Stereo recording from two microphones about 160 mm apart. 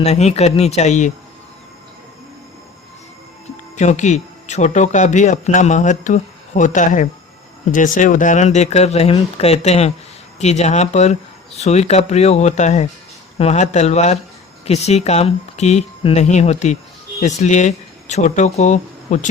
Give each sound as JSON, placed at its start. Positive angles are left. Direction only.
{"t": 0.0, "sound": "speech", "side_deg": 45}
{"t": 3.8, "sound": "speech", "side_deg": 45}